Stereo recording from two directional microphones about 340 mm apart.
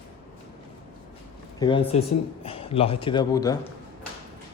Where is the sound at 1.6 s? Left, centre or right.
Centre.